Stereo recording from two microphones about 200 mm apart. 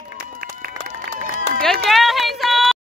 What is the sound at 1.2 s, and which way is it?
Run, 40° right (ahead or behind).